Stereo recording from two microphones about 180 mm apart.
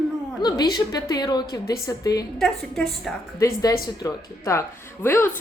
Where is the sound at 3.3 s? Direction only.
15° left (ahead or behind).